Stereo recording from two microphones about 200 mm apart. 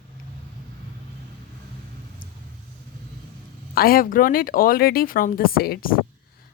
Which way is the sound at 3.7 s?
45° left (ahead or behind).